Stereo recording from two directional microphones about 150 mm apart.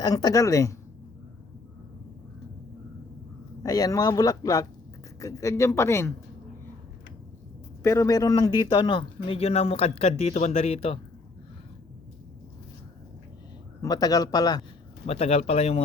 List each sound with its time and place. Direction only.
0.0 s speech: 25° left (ahead or behind)
3.6 s speech: 25° left (ahead or behind)
7.8 s speech: 20° left (ahead or behind); by 11.0 s 40° left (ahead or behind)
13.8 s speech: 25° left (ahead or behind)
15.0 s speech: 40° left (ahead or behind)